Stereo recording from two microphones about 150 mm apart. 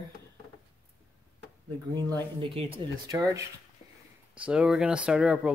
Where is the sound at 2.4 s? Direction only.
40° right (ahead or behind).